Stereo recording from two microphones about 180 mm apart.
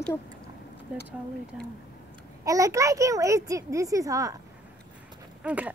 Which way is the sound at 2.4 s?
20° right (ahead or behind).